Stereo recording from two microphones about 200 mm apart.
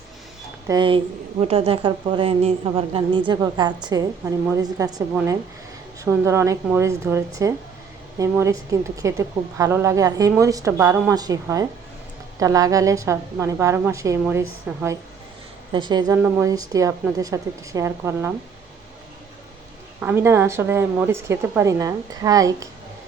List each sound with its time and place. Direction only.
0.7 s a woman's voice: 25° right (ahead or behind)
6.1 s a woman's voice: 15° right (ahead or behind)
15.7 s a woman's voice: 20° right (ahead or behind)
20.0 s a woman's voice: 10° right (ahead or behind)